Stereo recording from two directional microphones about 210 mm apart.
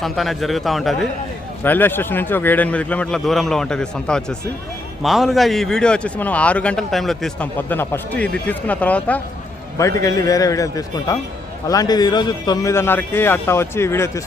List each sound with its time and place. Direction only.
0.0 s a man's voice: centre (ahead or behind)